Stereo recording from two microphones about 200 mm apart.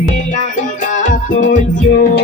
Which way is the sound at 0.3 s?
40° left (ahead or behind).